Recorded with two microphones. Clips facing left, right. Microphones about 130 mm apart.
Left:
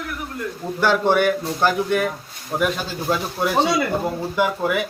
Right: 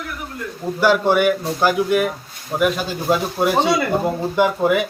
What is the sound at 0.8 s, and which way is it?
Speech, 10° right (ahead or behind).